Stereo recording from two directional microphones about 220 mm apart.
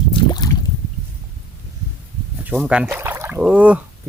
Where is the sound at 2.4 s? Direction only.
5° right (ahead or behind).